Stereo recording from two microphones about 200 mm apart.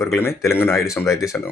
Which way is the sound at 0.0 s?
15° left (ahead or behind).